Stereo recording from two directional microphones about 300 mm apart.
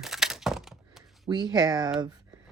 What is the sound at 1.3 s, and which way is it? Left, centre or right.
Speech, centre.